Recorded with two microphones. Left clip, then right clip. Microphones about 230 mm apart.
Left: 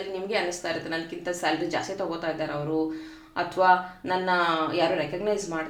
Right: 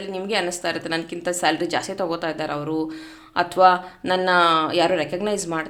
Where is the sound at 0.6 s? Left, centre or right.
Right.